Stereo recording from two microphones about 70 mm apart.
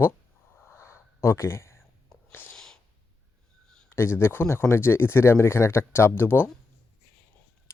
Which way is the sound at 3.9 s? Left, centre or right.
Left.